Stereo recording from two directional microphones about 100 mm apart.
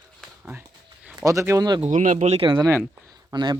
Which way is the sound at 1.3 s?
30° right (ahead or behind).